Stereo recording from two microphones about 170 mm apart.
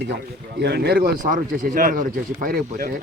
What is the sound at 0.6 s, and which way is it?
Speech, 75° right (ahead or behind).